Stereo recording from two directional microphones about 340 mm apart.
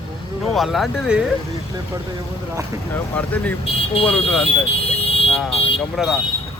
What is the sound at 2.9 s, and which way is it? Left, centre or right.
Speech, centre.